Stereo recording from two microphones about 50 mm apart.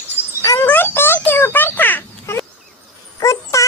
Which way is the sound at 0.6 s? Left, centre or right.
Left.